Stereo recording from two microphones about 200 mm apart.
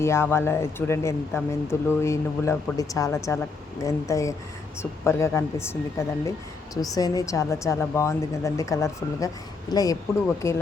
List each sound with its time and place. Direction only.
0.0 s speech: 15° left (ahead or behind)